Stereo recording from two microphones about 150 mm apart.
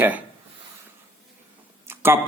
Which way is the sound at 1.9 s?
15° right (ahead or behind).